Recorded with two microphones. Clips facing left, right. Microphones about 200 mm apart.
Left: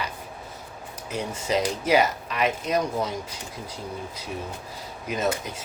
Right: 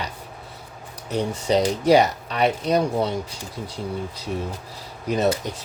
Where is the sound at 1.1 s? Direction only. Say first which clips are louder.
Right 5 dB; 35° right (ahead or behind).